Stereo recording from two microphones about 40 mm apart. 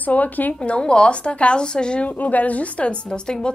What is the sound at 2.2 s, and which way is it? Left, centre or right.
A woman's voice, left.